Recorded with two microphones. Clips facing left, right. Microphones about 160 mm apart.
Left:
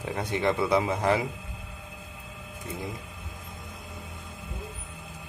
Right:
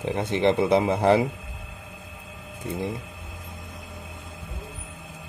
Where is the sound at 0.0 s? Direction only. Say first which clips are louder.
Right 5 dB; 25° right (ahead or behind).